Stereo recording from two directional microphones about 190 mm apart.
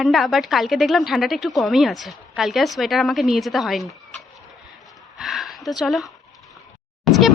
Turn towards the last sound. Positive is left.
turn(degrees=0)  # may be behind; listen again after turning